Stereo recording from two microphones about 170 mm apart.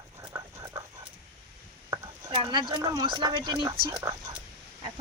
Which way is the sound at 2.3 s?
30° right (ahead or behind).